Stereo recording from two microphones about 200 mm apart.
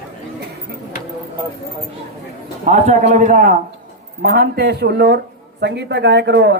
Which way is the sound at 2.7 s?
35° right (ahead or behind).